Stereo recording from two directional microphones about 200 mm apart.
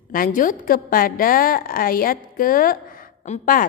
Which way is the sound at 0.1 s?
45° left (ahead or behind).